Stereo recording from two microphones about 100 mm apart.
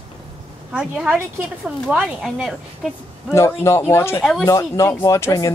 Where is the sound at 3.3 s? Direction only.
30° left (ahead or behind).